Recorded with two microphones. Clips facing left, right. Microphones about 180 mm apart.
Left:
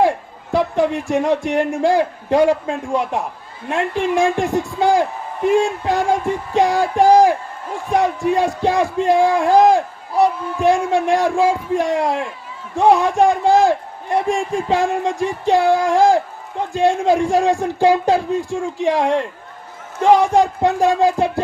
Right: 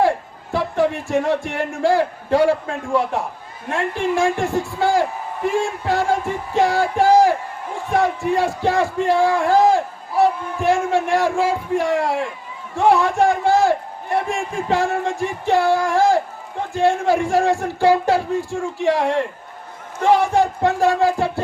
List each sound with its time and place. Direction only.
0.5 s a man's voice: 15° left (ahead or behind)